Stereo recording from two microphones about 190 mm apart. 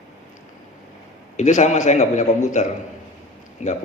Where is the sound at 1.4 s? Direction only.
40° left (ahead or behind).